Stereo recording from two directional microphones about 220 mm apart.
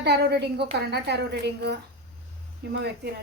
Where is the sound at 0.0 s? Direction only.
50° right (ahead or behind).